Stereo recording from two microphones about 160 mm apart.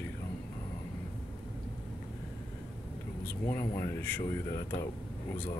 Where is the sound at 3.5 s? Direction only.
15° left (ahead or behind).